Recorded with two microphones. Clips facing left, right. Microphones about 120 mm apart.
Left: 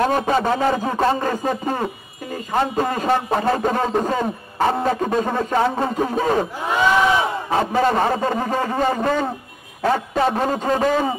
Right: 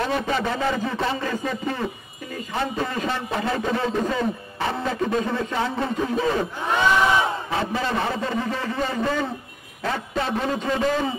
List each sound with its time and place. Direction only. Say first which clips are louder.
0.0 s a man's voice: left 5 dB; 45° left (ahead or behind)
7.5 s a man's voice: left 9 dB; 50° left (ahead or behind)